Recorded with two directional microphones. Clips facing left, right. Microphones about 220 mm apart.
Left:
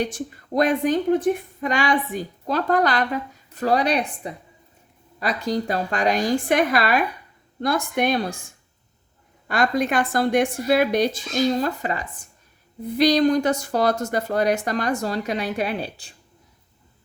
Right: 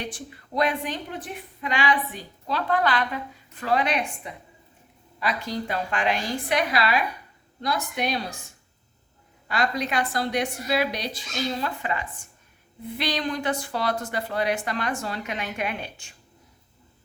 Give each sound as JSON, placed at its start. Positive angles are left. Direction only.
{"t": 0.0, "sound": "a woman's voice", "side_deg": 45}
{"t": 9.5, "sound": "a woman's voice", "side_deg": 50}